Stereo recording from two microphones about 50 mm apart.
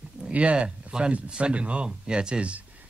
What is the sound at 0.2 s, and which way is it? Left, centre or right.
Speech, right.